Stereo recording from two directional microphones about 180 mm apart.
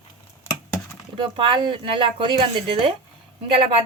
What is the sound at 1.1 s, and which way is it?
Speech, 25° right (ahead or behind).